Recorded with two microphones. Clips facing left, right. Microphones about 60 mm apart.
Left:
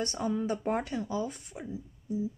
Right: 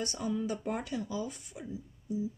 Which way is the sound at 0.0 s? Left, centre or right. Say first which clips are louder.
Left 3 dB; left.